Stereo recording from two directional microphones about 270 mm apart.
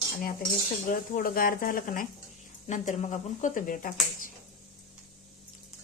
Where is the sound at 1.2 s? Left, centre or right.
Left.